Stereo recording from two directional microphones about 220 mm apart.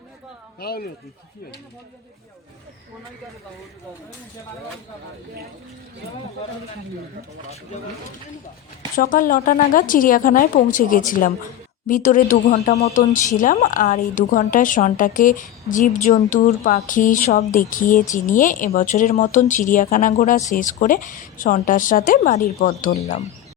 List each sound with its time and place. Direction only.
0.6 s speech: 45° left (ahead or behind)
9.0 s speech: 40° left (ahead or behind)